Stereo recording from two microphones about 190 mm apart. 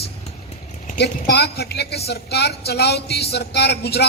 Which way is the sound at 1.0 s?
60° left (ahead or behind).